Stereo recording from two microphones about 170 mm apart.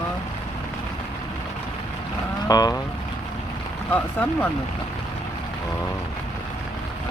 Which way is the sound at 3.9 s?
10° left (ahead or behind).